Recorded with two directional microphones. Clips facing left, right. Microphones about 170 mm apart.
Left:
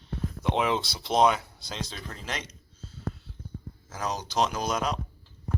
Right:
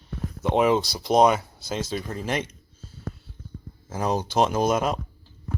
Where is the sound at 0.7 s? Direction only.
45° right (ahead or behind).